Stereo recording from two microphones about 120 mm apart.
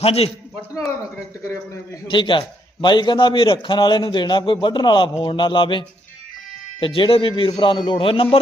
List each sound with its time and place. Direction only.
0.0 s speech: 55° left (ahead or behind)
2.0 s a man's voice: 45° left (ahead or behind)